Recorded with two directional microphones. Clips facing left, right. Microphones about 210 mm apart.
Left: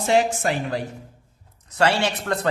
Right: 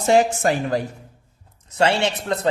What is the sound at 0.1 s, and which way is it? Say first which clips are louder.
Speech: right 3 dB; 45° right (ahead or behind).